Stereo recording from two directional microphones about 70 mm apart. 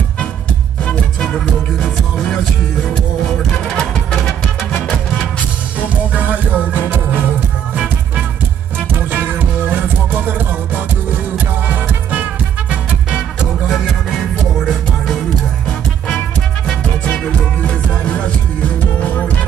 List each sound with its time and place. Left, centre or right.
1.8 s music: centre
5.8 s music: right
9.1 s music: right; by 13.8 s centre
16.6 s music: centre